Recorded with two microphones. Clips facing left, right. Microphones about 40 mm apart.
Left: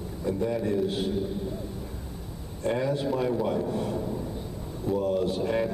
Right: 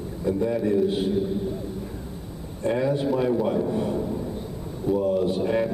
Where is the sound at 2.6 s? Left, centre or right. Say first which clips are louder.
Right 4 dB; centre.